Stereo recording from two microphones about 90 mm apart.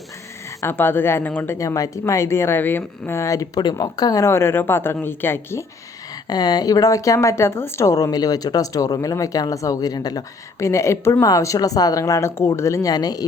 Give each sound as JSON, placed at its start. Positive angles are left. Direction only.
{"t": 0.6, "sound": "speech", "side_deg": 25}
{"t": 1.5, "sound": "a woman's voice", "side_deg": 35}
{"t": 6.2, "sound": "a woman's voice", "side_deg": 45}
{"t": 7.9, "sound": "speech", "side_deg": 45}
{"t": 10.6, "sound": "a woman's voice", "side_deg": 30}